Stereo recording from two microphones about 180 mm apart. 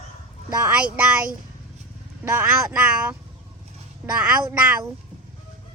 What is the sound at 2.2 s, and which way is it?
Speech, 10° right (ahead or behind).